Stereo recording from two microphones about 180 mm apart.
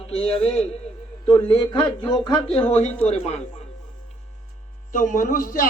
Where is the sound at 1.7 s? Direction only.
25° left (ahead or behind).